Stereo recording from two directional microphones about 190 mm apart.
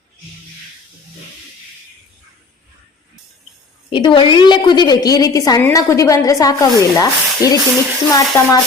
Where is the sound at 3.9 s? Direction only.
25° left (ahead or behind).